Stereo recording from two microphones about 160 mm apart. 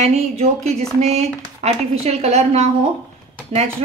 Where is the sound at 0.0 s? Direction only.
40° right (ahead or behind).